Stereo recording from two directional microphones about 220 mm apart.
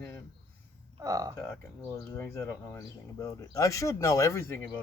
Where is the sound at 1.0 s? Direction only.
15° right (ahead or behind).